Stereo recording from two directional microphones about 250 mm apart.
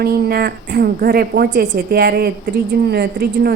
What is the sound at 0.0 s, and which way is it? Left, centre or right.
Speech, right.